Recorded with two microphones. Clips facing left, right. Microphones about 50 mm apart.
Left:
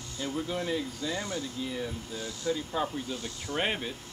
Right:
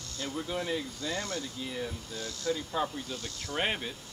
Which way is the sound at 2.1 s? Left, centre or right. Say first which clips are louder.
Left 1 dB; centre.